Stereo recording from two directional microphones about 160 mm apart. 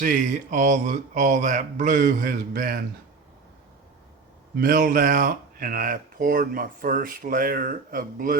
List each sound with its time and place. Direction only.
0.0 s speech: 60° right (ahead or behind)
4.5 s speech: 65° right (ahead or behind)